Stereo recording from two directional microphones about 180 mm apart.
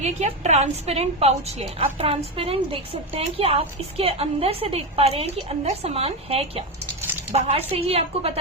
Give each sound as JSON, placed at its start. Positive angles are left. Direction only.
{"t": 0.0, "sound": "a woman's voice", "side_deg": -40}